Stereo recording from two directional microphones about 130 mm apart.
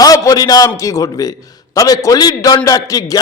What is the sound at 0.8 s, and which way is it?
A man's voice, 25° left (ahead or behind).